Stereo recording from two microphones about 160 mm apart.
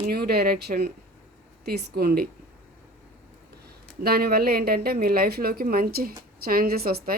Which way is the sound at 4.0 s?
75° right (ahead or behind).